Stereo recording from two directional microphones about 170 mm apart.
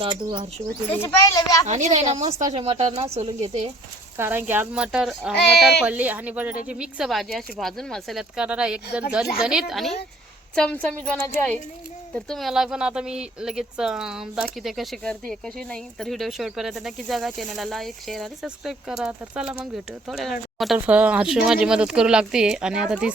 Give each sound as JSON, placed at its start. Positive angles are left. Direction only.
{"t": 0.0, "sound": "speech", "side_deg": -30}
{"t": 0.9, "sound": "a child's voice", "side_deg": 15}
{"t": 1.6, "sound": "a woman's voice", "side_deg": -45}
{"t": 4.2, "sound": "speech", "side_deg": -10}
{"t": 5.3, "sound": "speech", "side_deg": 80}
{"t": 5.8, "sound": "a woman's voice", "side_deg": -10}